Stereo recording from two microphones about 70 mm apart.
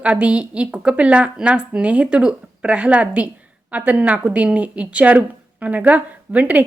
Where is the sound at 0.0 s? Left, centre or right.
Centre.